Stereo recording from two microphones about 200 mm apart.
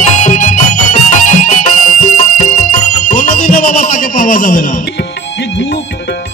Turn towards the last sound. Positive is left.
turn(degrees=40)  # may be behind; listen again after turning